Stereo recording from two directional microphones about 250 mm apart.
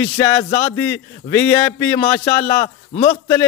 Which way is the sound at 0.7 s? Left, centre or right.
Centre.